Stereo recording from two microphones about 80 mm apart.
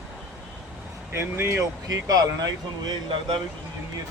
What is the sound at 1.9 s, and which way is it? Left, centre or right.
Speech, right.